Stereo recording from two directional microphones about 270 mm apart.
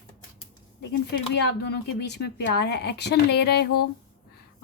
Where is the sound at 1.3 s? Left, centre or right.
Left.